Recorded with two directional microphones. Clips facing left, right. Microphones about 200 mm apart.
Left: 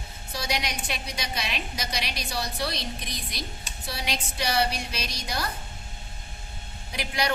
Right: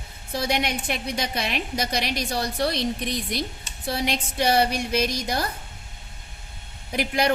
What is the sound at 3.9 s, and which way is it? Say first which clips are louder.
A woman's voice: right 7 dB; 50° right (ahead or behind).